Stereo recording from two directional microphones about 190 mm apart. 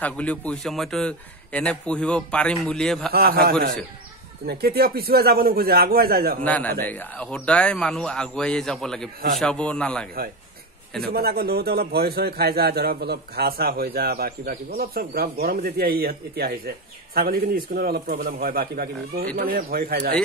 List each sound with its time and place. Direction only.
0.0 s a man's voice: 5° left (ahead or behind)
3.1 s speech: 55° right (ahead or behind)
6.4 s a man's voice: 10° left (ahead or behind)
11.1 s a man's voice: 55° right (ahead or behind)